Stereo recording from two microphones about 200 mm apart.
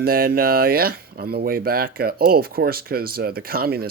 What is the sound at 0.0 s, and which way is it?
Speech, 50° right (ahead or behind).